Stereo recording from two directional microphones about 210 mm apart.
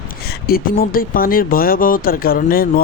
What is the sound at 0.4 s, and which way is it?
Speech, 45° left (ahead or behind).